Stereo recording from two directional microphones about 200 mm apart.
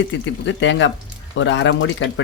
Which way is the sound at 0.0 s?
65° left (ahead or behind).